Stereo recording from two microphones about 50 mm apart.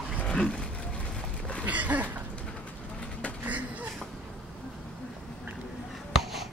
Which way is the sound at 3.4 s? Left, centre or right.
Right.